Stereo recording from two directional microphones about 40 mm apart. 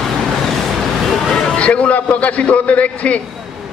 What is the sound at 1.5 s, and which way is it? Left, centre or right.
A man's voice, left.